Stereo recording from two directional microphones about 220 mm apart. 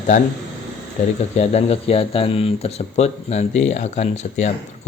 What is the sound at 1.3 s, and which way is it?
Speech, 30° left (ahead or behind).